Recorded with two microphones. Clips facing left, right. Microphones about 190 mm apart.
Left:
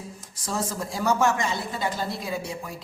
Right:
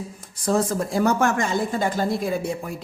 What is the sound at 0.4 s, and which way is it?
Speech, 55° right (ahead or behind).